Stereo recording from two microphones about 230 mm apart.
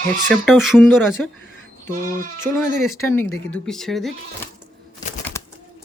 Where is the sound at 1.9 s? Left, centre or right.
Right.